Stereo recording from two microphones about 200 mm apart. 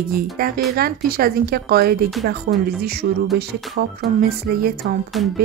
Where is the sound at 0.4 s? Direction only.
45° right (ahead or behind).